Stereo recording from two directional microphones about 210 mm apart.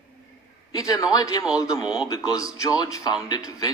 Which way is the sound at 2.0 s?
15° left (ahead or behind).